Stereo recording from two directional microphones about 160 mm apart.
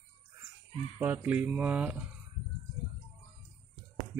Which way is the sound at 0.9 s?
10° right (ahead or behind).